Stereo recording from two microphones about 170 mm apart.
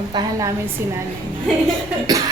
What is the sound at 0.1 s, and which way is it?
Speech, 25° right (ahead or behind).